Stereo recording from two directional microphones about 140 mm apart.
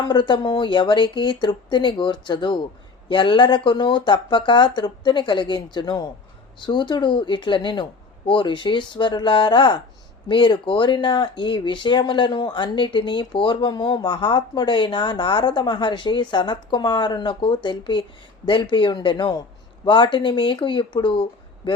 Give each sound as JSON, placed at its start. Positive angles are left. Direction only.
{"t": 0.0, "sound": "speech", "side_deg": 30}